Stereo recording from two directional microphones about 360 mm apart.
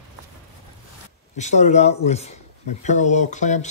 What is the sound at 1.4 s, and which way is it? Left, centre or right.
Speech, centre.